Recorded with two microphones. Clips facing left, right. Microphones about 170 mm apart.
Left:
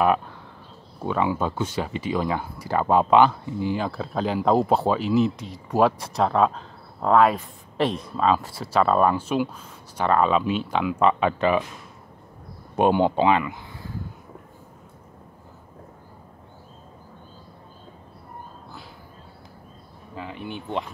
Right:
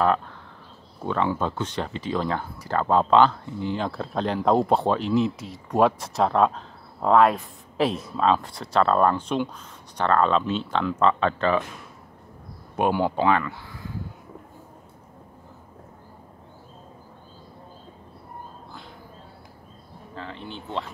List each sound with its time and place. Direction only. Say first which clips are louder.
1.0 s speech: left 1 dB; 10° left (ahead or behind)
12.7 s speech: left 3 dB; 25° left (ahead or behind)
20.2 s speech: left 3 dB; 10° left (ahead or behind)